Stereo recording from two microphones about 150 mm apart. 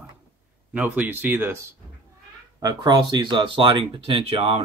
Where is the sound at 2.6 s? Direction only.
25° right (ahead or behind).